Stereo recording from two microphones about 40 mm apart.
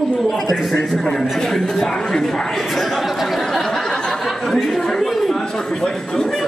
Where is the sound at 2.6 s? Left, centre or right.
Centre.